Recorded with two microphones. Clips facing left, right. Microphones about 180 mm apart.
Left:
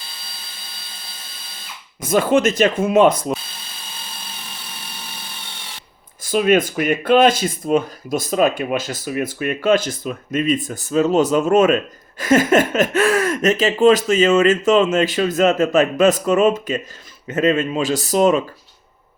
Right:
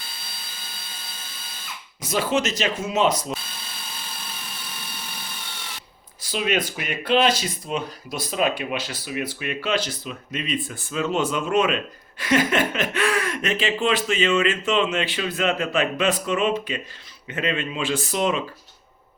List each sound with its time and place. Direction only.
2.0 s speech: 50° left (ahead or behind)
6.2 s speech: 50° left (ahead or behind)